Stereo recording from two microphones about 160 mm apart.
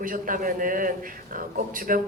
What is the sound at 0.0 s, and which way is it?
Speech, 60° right (ahead or behind).